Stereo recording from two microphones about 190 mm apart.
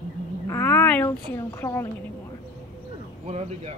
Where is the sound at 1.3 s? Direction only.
15° left (ahead or behind).